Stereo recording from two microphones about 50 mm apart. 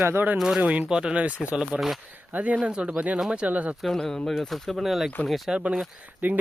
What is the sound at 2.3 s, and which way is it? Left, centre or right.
Speech, right.